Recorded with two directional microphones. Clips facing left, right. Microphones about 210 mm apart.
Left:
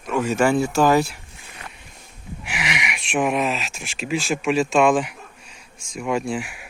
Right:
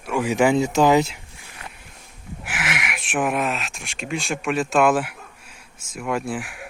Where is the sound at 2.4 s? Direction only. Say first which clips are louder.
Even; centre (ahead or behind).